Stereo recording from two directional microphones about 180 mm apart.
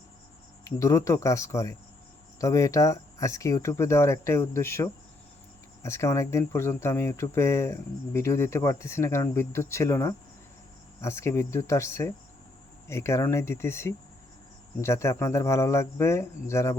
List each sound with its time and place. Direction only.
0.6 s speech: 20° left (ahead or behind)